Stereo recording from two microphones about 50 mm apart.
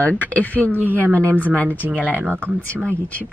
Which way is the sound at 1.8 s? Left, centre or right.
Right.